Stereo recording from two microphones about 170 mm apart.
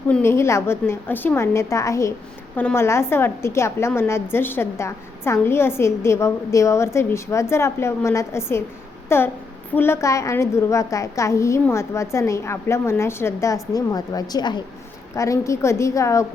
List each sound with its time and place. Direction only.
0.1 s a woman's voice: 15° left (ahead or behind)